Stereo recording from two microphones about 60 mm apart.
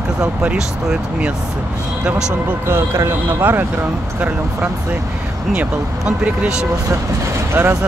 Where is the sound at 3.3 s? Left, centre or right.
Right.